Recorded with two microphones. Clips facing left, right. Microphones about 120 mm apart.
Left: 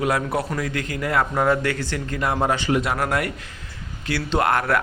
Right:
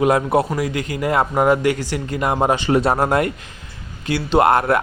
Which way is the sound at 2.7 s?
35° right (ahead or behind).